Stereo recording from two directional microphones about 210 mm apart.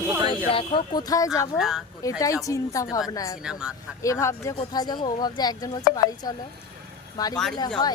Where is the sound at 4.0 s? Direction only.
15° left (ahead or behind).